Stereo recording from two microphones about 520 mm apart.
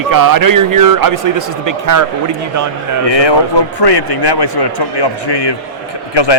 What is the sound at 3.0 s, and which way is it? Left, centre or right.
Speech, left.